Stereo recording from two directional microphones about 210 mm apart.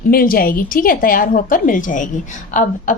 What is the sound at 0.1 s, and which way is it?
A woman's voice, 45° left (ahead or behind).